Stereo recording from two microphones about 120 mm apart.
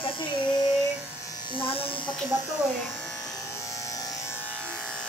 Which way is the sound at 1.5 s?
50° left (ahead or behind).